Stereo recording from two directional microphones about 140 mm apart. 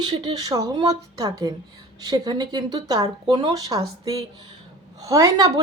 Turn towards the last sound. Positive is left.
turn(degrees=-25)  # may be behind; listen again after turning